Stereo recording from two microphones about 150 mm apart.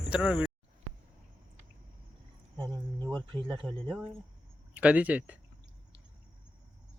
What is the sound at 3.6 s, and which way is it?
Speech, centre (ahead or behind).